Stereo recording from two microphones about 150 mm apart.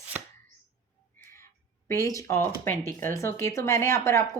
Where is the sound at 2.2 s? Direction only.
20° left (ahead or behind).